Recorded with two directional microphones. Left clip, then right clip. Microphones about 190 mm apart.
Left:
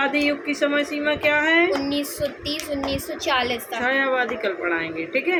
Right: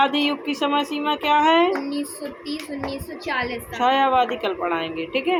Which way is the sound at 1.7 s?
70° left (ahead or behind).